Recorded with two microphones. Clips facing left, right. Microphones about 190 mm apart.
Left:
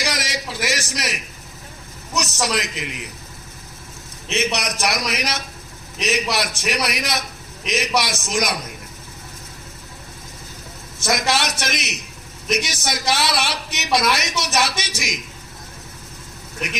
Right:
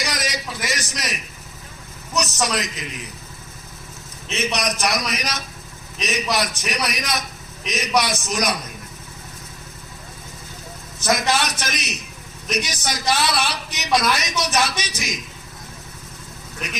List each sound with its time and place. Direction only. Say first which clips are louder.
0.0 s a sound: left 1 dB; 80° left
2.1 s a man's voice: even; 75° left (ahead or behind)
4.3 s a man's voice: left 1 dB; 75° left (ahead or behind)
11.1 s a man's voice: right 1 dB; 75° left (ahead or behind)